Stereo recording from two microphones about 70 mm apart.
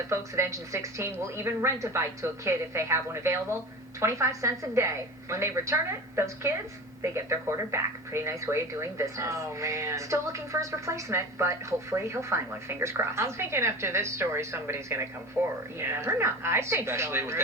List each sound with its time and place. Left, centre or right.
0.1 s speech: right
15.4 s speech: centre
15.8 s speech: right